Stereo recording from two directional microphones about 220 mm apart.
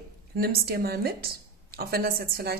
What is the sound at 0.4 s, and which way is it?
A woman's voice, 45° right (ahead or behind).